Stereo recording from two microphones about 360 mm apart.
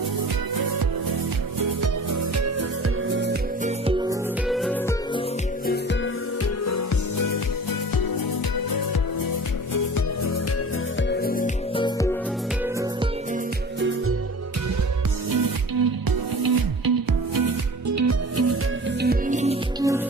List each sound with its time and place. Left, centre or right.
2.3 s music: right
3.1 s music: right
3.8 s music: centre
4.4 s music: centre
5.6 s music: left
6.4 s music: left
11.1 s music: left
15.8 s music: right; by 20.0 s centre